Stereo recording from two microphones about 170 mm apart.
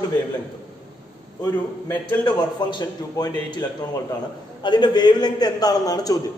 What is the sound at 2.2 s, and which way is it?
A man's voice, 25° left (ahead or behind).